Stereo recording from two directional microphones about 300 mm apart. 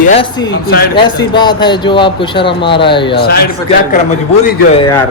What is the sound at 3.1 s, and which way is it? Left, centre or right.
Speech, left.